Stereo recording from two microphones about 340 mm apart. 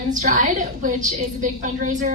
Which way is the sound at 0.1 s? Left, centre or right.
Right.